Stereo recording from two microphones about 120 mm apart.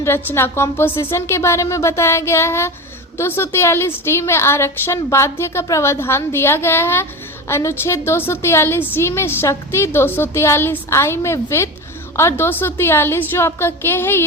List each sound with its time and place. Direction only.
0.0 s a woman's voice: 20° left (ahead or behind)